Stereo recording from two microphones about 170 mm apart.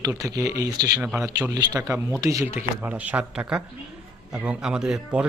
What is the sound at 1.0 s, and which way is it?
Speech, centre (ahead or behind).